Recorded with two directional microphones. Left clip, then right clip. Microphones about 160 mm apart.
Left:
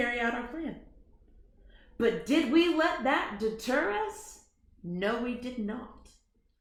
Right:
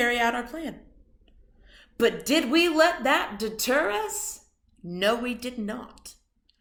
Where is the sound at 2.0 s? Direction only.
20° right (ahead or behind).